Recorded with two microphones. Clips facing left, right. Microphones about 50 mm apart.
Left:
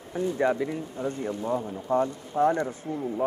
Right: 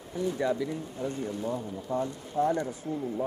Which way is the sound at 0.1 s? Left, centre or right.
Left.